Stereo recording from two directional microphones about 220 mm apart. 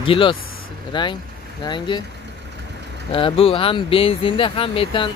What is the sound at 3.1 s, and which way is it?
Speech, 25° left (ahead or behind).